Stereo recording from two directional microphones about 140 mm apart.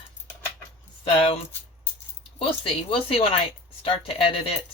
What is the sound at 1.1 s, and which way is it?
Speech, 45° left (ahead or behind).